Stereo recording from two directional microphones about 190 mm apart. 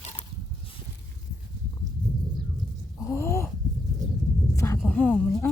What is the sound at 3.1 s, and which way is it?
Gasp, 15° left (ahead or behind).